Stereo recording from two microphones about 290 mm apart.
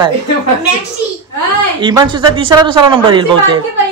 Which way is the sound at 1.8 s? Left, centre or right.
Centre.